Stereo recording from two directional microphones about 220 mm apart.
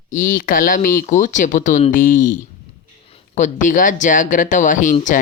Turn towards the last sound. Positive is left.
turn(degrees=35)  # may be behind; listen again after turning